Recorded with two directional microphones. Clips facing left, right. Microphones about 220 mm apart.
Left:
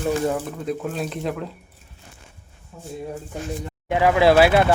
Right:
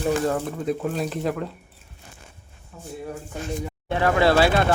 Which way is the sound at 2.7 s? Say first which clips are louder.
Left 2 dB; 15° left (ahead or behind).